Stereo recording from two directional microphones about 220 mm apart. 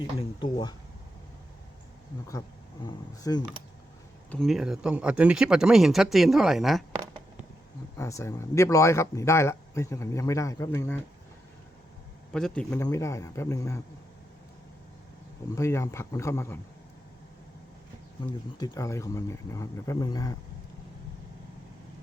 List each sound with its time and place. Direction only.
0.2 s speech: 20° left (ahead or behind)
2.8 s speech: 20° left (ahead or behind)
4.3 s speech: centre (ahead or behind)
7.9 s speech: 15° left (ahead or behind)
12.3 s speech: 5° left (ahead or behind)
15.4 s speech: 15° left (ahead or behind)
18.2 s speech: 15° left (ahead or behind)